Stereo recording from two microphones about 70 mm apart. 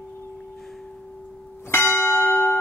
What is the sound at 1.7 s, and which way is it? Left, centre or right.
Church bell, left.